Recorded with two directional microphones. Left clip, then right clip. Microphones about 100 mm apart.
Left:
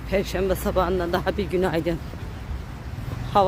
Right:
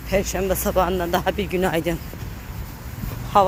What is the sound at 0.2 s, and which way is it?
Speech, 20° left (ahead or behind).